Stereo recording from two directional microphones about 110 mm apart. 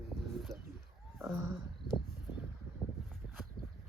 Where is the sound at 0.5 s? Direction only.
30° right (ahead or behind).